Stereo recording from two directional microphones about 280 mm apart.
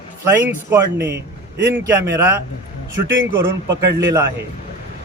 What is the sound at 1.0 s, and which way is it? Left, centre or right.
Speech, right.